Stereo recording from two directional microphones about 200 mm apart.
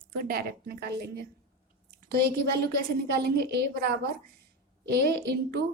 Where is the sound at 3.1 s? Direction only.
55° right (ahead or behind).